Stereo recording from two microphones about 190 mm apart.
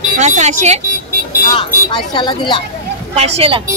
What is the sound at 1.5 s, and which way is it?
A woman's voice, 25° left (ahead or behind).